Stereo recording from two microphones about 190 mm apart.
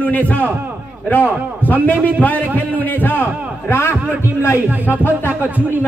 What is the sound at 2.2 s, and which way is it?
A man's voice, 10° left (ahead or behind).